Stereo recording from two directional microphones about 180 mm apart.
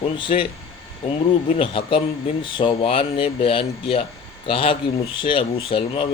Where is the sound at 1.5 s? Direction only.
30° left (ahead or behind).